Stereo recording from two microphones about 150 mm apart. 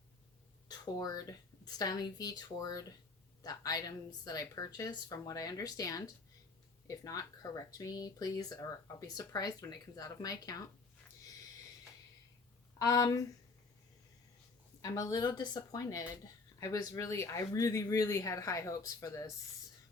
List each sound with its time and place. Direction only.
0.7 s speech: 25° left (ahead or behind)
12.8 s speech: 25° left (ahead or behind)
14.8 s speech: 25° left (ahead or behind)